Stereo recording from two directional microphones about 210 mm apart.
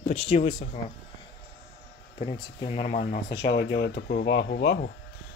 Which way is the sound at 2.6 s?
30° left (ahead or behind).